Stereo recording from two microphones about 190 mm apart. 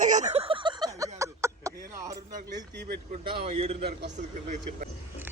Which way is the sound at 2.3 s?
45° right (ahead or behind).